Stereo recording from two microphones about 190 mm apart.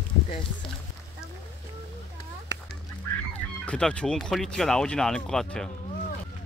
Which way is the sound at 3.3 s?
5° left (ahead or behind).